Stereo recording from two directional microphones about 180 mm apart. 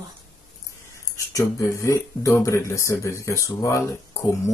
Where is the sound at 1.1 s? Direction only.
20° left (ahead or behind).